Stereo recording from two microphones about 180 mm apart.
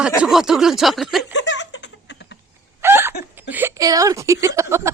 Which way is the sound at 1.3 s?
80° left.